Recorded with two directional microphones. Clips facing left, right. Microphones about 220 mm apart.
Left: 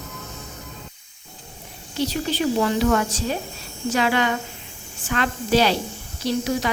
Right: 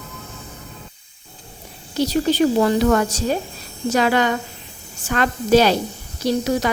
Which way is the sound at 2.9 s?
50° right (ahead or behind).